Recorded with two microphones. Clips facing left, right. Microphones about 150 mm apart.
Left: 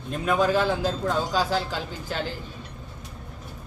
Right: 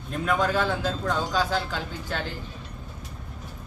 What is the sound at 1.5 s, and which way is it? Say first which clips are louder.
Speech: left 1 dB; 10° left (ahead or behind).